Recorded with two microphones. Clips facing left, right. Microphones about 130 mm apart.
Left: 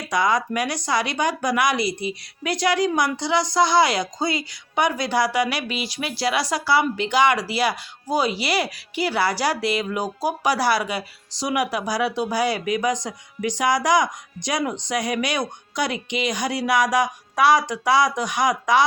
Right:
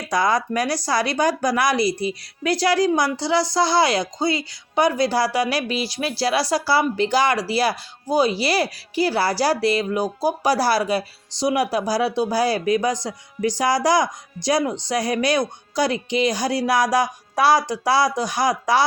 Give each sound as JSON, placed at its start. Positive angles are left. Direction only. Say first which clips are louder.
{"t": 0.1, "sound": "speech", "louder": "right 1 dB", "side_deg": -35}